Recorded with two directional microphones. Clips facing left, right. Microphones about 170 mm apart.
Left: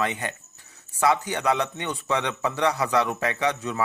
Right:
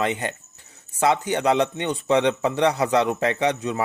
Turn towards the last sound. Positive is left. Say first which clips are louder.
# right 3 dB
turn(degrees=-20)  # may be behind; listen again after turning